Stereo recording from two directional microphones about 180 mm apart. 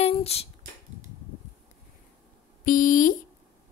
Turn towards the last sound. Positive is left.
turn(degrees=50)  # may be behind; listen again after turning